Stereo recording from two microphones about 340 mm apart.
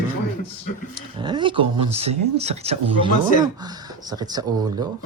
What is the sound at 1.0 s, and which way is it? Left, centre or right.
Speech, centre.